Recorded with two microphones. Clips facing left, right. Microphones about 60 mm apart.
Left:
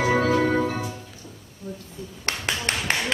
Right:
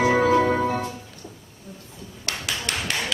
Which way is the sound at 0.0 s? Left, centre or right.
Centre.